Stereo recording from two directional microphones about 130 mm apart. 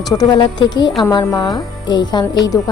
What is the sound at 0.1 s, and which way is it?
A woman's voice, 30° left (ahead or behind).